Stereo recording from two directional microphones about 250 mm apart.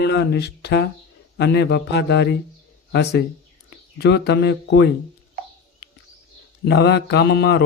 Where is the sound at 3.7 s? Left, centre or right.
Left.